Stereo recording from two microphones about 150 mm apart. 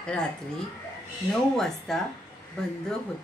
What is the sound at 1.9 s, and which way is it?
Speech, centre (ahead or behind).